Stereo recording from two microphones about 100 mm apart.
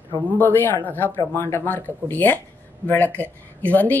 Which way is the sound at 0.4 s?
20° left (ahead or behind).